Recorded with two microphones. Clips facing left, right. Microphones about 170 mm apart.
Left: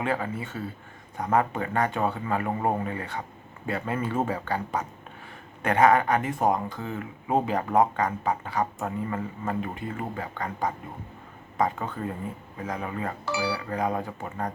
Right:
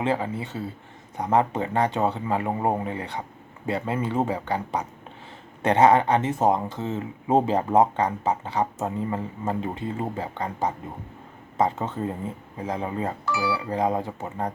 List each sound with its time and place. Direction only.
0.0 s speech: 25° right (ahead or behind)